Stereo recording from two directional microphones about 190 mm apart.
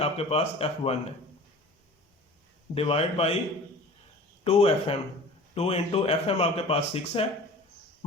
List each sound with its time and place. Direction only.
0.0 s speech: 30° left (ahead or behind)
2.7 s speech: 30° left (ahead or behind)
4.4 s speech: 35° left (ahead or behind)